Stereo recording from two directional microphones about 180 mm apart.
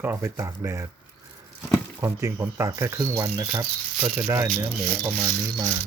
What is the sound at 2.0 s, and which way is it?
Speech, 15° right (ahead or behind).